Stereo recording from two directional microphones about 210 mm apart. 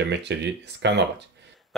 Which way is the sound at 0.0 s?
55° right (ahead or behind).